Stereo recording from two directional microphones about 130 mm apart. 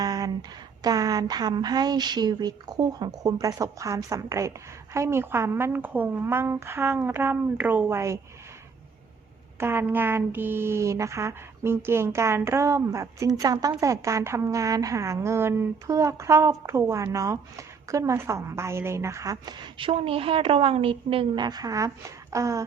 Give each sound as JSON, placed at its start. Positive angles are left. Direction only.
{"t": 0.0, "sound": "a sound", "side_deg": -30}
{"t": 0.8, "sound": "a woman's voice", "side_deg": -30}
{"t": 9.6, "sound": "speech", "side_deg": -15}
{"t": 19.8, "sound": "a woman's voice", "side_deg": -45}